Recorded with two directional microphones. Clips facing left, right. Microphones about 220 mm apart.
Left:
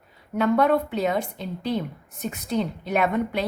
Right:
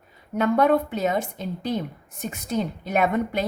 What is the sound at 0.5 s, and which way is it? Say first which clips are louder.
A woman's voice: right 1 dB; 45° right (ahead or behind).